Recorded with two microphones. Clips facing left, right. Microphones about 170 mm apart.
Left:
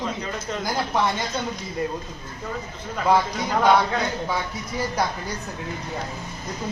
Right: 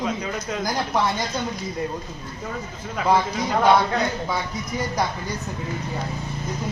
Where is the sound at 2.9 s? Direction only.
5° right (ahead or behind).